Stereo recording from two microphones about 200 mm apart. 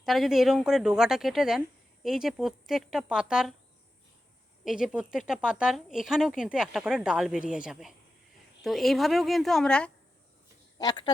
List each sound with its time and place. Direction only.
0.0 s speech: centre (ahead or behind)
4.6 s speech: 5° right (ahead or behind)
10.8 s speech: 20° left (ahead or behind)